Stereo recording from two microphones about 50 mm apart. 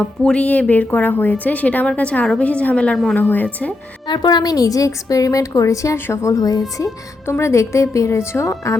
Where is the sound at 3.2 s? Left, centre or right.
Left.